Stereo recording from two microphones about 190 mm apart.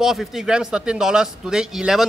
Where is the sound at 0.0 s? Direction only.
Centre (ahead or behind).